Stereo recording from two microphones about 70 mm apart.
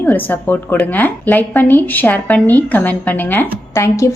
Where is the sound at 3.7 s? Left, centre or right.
Left.